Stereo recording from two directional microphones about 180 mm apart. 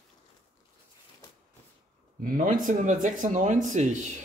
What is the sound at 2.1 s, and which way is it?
Speech, 50° right (ahead or behind).